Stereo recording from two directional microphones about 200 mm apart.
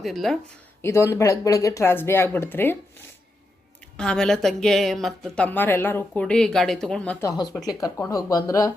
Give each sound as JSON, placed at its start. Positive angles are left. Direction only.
{"t": 0.0, "sound": "speech", "side_deg": 0}
{"t": 0.8, "sound": "speech", "side_deg": 15}
{"t": 3.9, "sound": "speech", "side_deg": 5}